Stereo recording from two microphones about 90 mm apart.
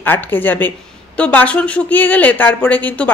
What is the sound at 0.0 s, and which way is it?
A woman's voice, 20° left (ahead or behind).